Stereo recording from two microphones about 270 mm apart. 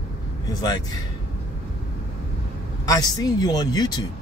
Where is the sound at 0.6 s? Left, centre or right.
Centre.